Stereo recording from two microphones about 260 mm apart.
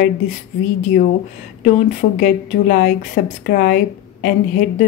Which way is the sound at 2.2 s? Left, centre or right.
Left.